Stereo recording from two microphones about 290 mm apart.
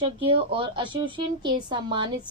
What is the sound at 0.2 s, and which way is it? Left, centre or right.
Speech, centre.